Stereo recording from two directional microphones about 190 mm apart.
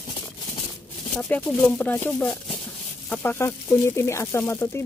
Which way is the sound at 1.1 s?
5° left (ahead or behind).